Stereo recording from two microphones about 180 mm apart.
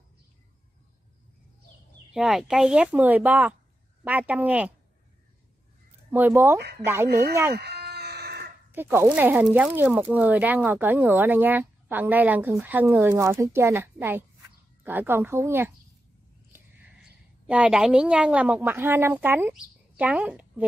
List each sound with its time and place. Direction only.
2.1 s speech: centre (ahead or behind)
6.1 s speech: 10° right (ahead or behind)
7.5 s chicken: 65° right (ahead or behind)
8.7 s speech: 15° right (ahead or behind)
16.5 s a sound: 10° right (ahead or behind)
17.5 s speech: 5° right (ahead or behind)